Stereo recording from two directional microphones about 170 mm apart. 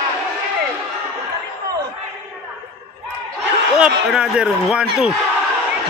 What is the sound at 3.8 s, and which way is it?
A man's voice, 5° right (ahead or behind).